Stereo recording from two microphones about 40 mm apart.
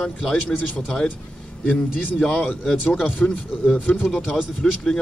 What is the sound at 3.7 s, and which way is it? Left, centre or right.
Speech, left.